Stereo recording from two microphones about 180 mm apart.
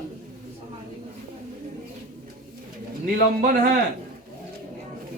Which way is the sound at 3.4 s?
50° right (ahead or behind).